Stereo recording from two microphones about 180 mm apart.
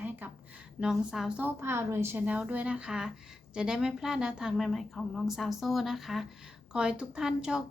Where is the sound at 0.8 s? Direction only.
5° right (ahead or behind).